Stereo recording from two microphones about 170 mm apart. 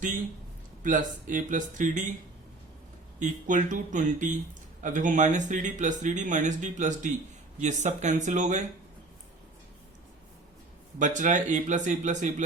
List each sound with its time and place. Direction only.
0.8 s speech: 50° right (ahead or behind)
3.2 s speech: 50° right (ahead or behind)
11.0 s speech: 50° right (ahead or behind)